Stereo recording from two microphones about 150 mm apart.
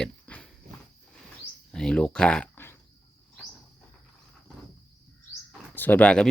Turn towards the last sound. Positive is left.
turn(degrees=5)  # may be behind; listen again after turning